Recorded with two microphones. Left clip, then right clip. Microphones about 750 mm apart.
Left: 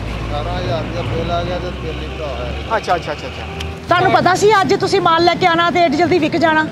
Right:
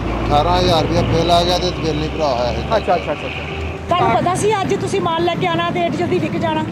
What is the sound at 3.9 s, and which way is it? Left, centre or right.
Speech, left.